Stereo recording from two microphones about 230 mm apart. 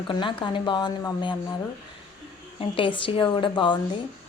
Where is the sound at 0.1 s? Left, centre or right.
Left.